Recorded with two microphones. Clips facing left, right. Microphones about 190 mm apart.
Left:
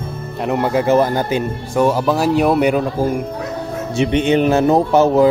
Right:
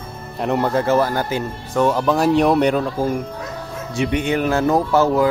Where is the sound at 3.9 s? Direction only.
25° left (ahead or behind).